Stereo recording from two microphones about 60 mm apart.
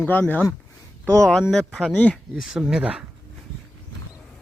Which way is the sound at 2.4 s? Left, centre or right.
Centre.